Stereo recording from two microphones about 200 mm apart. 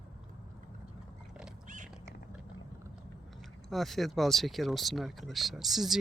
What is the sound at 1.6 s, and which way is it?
Cat, 40° right (ahead or behind).